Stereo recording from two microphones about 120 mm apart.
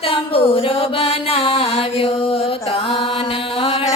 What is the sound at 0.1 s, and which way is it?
Music, 50° left (ahead or behind).